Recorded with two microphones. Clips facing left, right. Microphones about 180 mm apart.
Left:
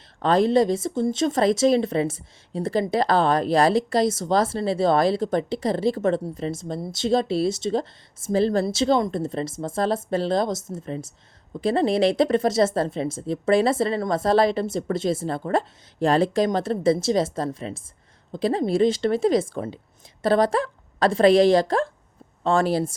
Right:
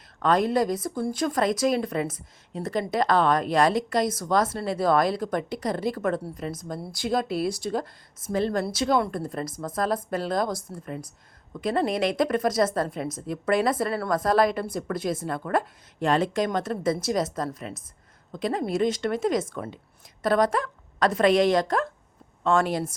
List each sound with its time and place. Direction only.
0.2 s a woman's voice: 30° left (ahead or behind)